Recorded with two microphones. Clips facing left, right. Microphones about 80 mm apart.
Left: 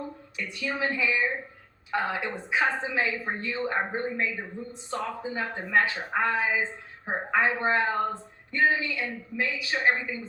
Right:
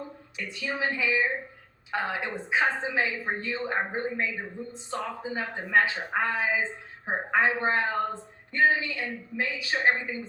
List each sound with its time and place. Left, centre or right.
0.3 s a woman's voice: right